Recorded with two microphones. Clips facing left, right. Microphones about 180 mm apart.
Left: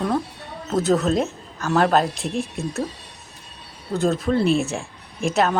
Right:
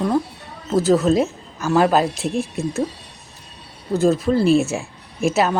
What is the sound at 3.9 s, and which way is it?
Speech, centre (ahead or behind).